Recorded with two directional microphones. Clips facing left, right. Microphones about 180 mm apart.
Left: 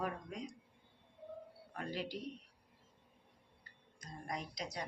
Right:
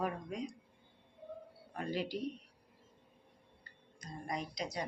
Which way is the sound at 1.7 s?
5° right (ahead or behind).